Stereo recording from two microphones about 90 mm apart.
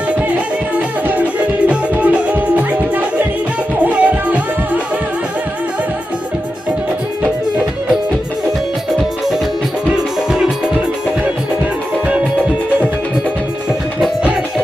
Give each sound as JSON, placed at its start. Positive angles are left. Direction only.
{"t": 0.8, "sound": "music", "side_deg": -20}